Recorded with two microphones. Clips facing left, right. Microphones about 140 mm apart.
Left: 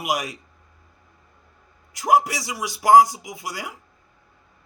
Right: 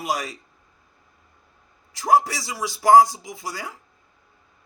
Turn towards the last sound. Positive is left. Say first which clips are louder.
# even
turn(degrees=15)  # may be behind; listen again after turning